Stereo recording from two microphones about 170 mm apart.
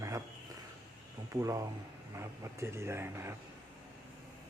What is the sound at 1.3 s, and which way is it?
Speech, 20° right (ahead or behind).